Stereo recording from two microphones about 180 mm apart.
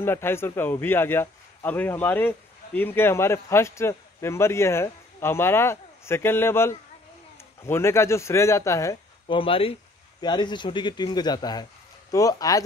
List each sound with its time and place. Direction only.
0.0 s a man's voice: 10° left (ahead or behind)
9.3 s speech: 30° left (ahead or behind)